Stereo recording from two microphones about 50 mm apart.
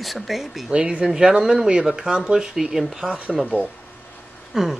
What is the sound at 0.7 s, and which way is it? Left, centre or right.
Speech, right.